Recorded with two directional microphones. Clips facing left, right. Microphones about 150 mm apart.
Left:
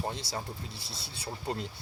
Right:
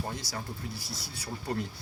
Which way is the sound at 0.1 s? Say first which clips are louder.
Left 1 dB; 25° left (ahead or behind).